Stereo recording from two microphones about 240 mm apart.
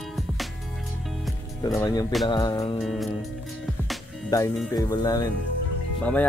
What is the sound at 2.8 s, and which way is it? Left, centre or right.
Music, centre.